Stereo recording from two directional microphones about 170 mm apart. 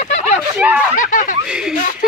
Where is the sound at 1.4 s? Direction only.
5° right (ahead or behind).